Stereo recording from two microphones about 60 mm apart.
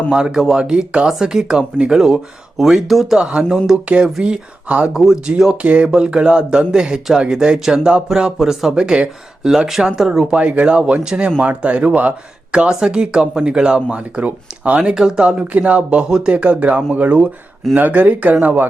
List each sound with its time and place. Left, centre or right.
0.1 s speech: centre
5.6 s speech: centre
10.4 s speech: right
14.8 s speech: centre; by 18.7 s right